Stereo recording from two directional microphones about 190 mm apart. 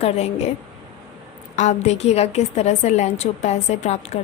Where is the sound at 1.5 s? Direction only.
35° left (ahead or behind).